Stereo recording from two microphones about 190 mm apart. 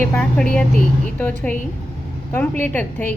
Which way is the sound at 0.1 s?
5° left (ahead or behind).